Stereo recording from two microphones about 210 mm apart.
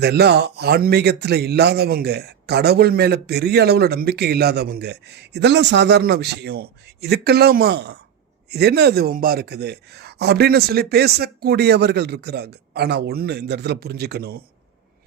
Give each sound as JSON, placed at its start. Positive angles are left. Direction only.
{"t": 0.0, "sound": "speech", "side_deg": -50}